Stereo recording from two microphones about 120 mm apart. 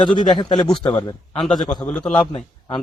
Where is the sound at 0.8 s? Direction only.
40° left (ahead or behind).